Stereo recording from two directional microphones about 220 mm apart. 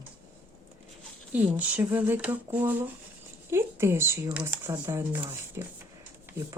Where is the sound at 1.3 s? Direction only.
5° right (ahead or behind).